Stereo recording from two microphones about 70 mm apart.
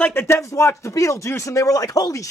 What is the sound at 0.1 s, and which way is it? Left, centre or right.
Speech, left.